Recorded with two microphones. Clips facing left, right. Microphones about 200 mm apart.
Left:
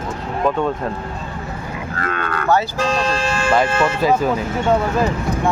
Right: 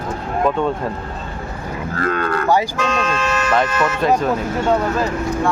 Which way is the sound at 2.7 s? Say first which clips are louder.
Left 1 dB; 35° left (ahead or behind).